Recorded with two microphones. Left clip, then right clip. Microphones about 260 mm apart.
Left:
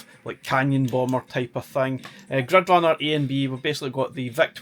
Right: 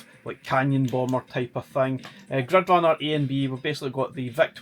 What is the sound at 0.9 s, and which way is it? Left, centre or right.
Speech, left.